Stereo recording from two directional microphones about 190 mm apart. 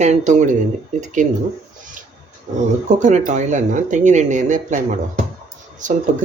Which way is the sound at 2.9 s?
40° right (ahead or behind).